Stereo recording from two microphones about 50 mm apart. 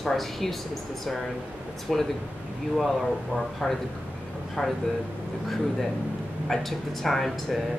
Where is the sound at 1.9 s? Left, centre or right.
Centre.